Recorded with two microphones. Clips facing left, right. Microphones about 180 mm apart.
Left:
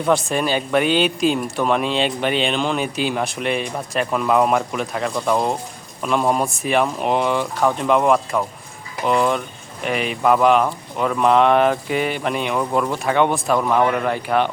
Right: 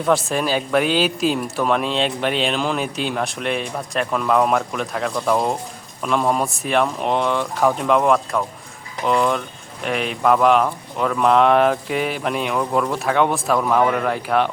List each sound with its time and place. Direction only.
0.0 s speech: centre (ahead or behind)